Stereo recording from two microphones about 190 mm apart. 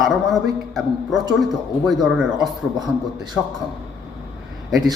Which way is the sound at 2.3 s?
20° right (ahead or behind).